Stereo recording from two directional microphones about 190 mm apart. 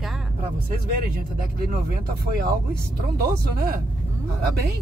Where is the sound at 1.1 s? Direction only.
50° right (ahead or behind).